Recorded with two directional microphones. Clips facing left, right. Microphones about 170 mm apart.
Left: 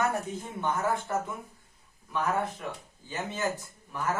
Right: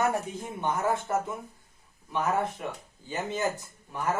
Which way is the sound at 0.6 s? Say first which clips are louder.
Right 1 dB; 20° right (ahead or behind).